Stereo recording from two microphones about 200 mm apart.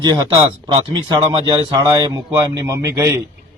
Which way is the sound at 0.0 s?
20° right (ahead or behind).